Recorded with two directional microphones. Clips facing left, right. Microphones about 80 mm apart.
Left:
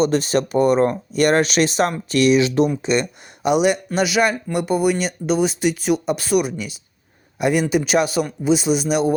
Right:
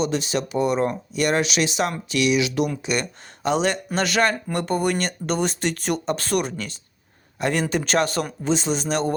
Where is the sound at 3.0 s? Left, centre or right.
Centre.